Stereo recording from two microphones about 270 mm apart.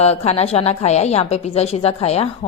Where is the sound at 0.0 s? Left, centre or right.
Left.